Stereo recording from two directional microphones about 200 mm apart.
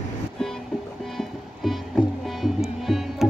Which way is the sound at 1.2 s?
Centre (ahead or behind).